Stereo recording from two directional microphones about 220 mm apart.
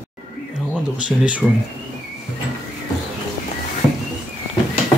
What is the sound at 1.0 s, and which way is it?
Speech, 5° right (ahead or behind).